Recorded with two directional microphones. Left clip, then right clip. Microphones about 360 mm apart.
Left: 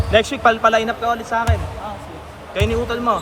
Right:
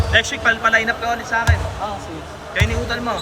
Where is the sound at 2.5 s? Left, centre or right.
Centre.